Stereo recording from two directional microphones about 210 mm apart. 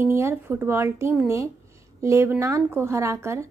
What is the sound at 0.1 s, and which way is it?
A woman's voice, 15° right (ahead or behind).